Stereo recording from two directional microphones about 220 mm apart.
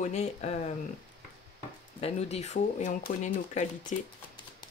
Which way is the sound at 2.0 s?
30° left (ahead or behind).